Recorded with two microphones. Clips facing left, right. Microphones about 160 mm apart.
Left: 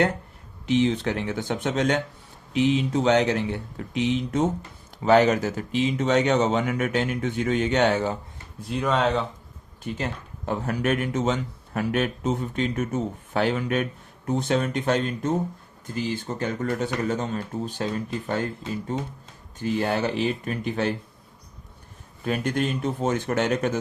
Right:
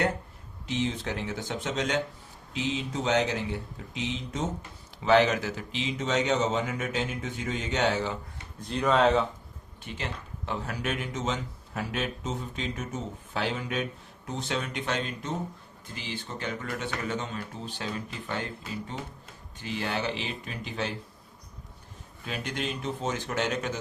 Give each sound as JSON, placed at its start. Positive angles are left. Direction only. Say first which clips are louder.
{"t": 0.7, "sound": "speech", "louder": "left 8 dB", "side_deg": 65}
{"t": 5.0, "sound": "speech", "louder": "left 4 dB", "side_deg": 45}
{"t": 8.6, "sound": "speech", "louder": "even", "side_deg": 0}
{"t": 9.8, "sound": "speech", "louder": "left 7 dB", "side_deg": 45}
{"t": 22.2, "sound": "speech", "louder": "left 9 dB", "side_deg": 50}